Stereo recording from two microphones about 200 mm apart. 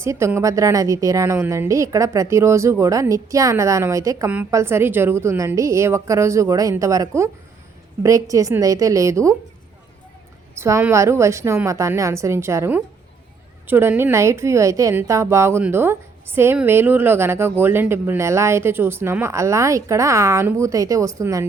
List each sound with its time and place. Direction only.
0.0 s a woman's voice: 15° right (ahead or behind)
10.6 s a woman's voice: 15° right (ahead or behind)